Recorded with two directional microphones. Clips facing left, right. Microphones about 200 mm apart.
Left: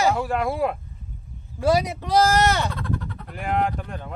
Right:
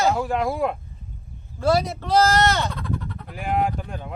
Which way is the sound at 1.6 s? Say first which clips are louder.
Even; 15° left (ahead or behind).